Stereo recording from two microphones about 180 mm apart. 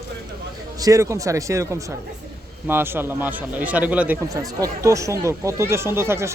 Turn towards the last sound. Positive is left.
turn(degrees=-15)  # may be behind; listen again after turning